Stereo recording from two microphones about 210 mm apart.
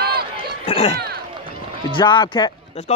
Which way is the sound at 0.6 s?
25° left (ahead or behind).